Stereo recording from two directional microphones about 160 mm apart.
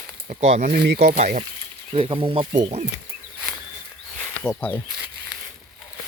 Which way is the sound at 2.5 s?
45° right (ahead or behind).